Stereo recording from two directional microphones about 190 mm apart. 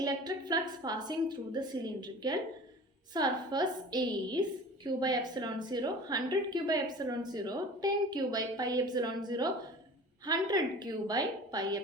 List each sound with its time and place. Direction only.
0.0 s a woman's voice: 20° right (ahead or behind)